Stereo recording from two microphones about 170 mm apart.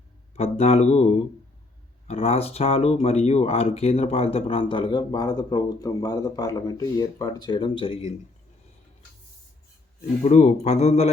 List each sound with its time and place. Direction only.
0.3 s speech: 35° left (ahead or behind)
10.2 s speech: 40° left (ahead or behind)